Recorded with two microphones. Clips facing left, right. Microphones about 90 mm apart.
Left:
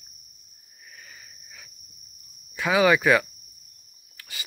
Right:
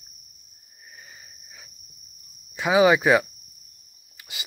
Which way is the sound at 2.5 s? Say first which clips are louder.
Right 2 dB; 20° right (ahead or behind).